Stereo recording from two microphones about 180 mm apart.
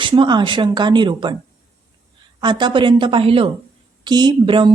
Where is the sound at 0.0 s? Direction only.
25° right (ahead or behind).